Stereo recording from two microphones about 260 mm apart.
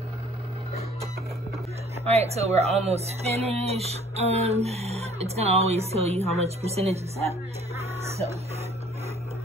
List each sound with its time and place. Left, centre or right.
2.0 s speech: right